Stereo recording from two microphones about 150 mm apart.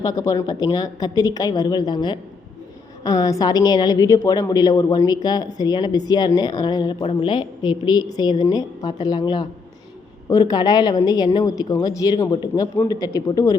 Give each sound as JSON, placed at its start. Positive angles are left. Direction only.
{"t": 0.0, "sound": "a woman's voice", "side_deg": 25}